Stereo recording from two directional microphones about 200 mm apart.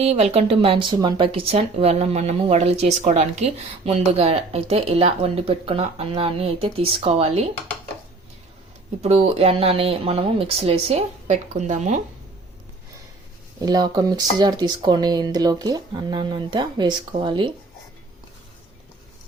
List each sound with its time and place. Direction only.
0.0 s speech: 30° right (ahead or behind)
9.0 s speech: 30° right (ahead or behind)
13.6 s speech: 20° right (ahead or behind)